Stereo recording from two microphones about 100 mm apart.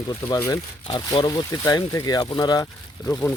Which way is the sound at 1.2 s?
40° left (ahead or behind).